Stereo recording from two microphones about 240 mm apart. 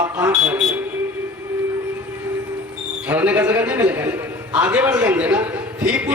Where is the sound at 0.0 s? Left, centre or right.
Centre.